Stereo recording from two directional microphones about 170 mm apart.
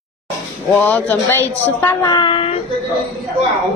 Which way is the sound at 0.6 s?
10° left (ahead or behind).